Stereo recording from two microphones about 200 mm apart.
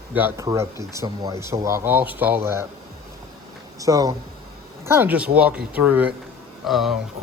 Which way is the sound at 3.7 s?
15° right (ahead or behind).